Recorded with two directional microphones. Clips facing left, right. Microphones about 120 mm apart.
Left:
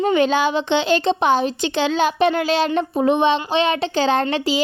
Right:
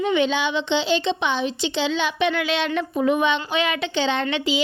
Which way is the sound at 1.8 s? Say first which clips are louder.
Left 5 dB; 45° left (ahead or behind).